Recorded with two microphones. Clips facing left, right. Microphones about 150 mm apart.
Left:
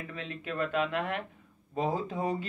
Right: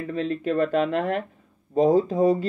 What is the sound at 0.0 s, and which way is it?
Speech, 40° right (ahead or behind).